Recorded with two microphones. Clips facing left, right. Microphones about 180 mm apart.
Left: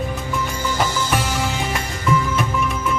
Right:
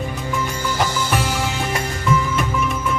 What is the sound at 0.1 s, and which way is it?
Music, centre (ahead or behind).